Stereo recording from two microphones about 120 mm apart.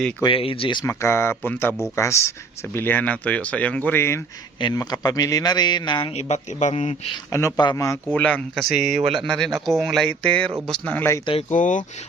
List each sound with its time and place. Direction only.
0.2 s speech: 45° left (ahead or behind)
0.9 s speech: 20° left (ahead or behind)
4.6 s a man's voice: 30° left (ahead or behind)
6.1 s a man's voice: 65° left (ahead or behind)
7.3 s speech: 25° left (ahead or behind)
7.5 s a man's voice: 35° left (ahead or behind)
8.1 s speech: 10° left (ahead or behind)
8.7 s speech: 5° right (ahead or behind)
10.1 s speech: 10° left (ahead or behind)
11.5 s speech: 90° left